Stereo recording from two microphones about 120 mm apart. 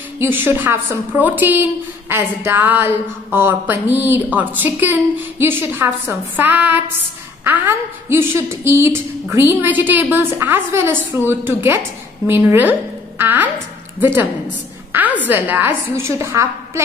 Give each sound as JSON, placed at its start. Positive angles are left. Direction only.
{"t": 0.2, "sound": "a woman's voice", "side_deg": -20}